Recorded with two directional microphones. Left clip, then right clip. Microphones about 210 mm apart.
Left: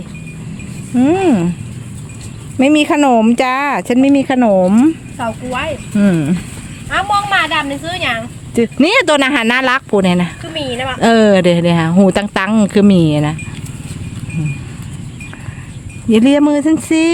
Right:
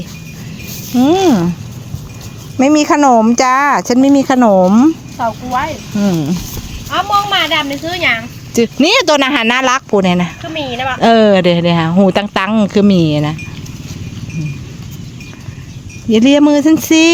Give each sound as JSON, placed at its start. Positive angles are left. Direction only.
{"t": 0.9, "sound": "speech", "side_deg": -5}
{"t": 2.6, "sound": "speech", "side_deg": 0}
{"t": 5.1, "sound": "speech", "side_deg": 55}
{"t": 6.0, "sound": "speech", "side_deg": 15}
{"t": 6.9, "sound": "speech", "side_deg": 60}
{"t": 8.5, "sound": "speech", "side_deg": 0}
{"t": 16.0, "sound": "speech", "side_deg": -5}